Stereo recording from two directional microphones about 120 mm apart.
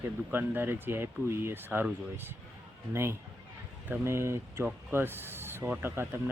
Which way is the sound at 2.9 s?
20° right (ahead or behind).